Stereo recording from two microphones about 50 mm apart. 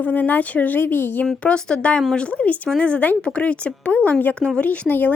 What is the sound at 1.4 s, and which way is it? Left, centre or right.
Speech, centre.